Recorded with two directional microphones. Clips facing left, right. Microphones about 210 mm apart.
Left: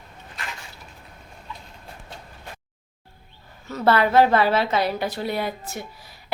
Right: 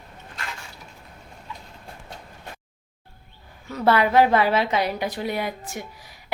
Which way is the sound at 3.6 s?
10° right (ahead or behind).